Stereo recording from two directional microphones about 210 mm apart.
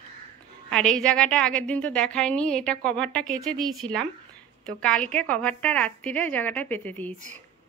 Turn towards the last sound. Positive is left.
turn(degrees=10)  # may be behind; listen again after turning